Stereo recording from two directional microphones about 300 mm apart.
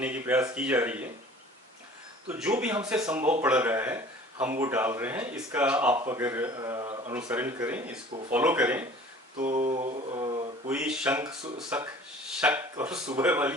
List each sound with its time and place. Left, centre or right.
0.0 s speech: centre
2.3 s speech: centre
9.4 s mantra: right
10.7 s speech: centre